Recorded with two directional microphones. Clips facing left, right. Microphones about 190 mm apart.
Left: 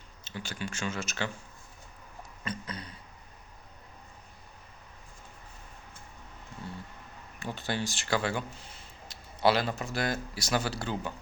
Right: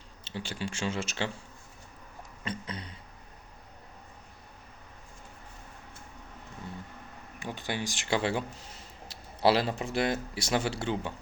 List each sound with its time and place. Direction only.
0.3 s speech: 30° right (ahead or behind)
2.4 s a sound: 25° right (ahead or behind)
7.3 s speech: 15° right (ahead or behind)